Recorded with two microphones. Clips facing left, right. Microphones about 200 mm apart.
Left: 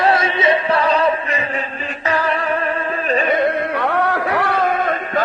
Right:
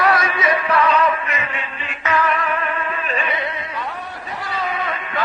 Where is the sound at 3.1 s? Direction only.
45° left (ahead or behind).